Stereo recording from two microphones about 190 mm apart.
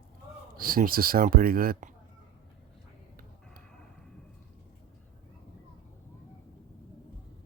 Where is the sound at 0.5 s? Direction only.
50° right (ahead or behind).